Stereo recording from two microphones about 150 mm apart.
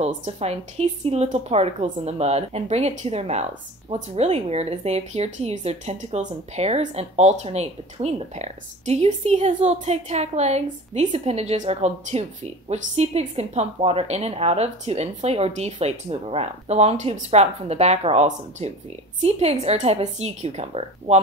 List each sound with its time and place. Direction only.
0.0 s speech: 45° right (ahead or behind)